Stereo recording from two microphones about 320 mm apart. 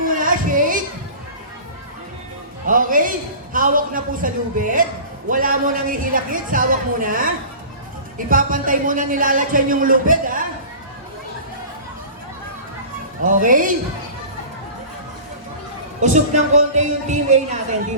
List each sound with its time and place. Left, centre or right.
0.0 s a sound: right
2.6 s a man's voice: right
13.2 s a man's voice: right
16.0 s a man's voice: right